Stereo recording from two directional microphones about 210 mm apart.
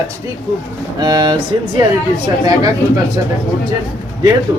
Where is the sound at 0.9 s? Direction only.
20° right (ahead or behind).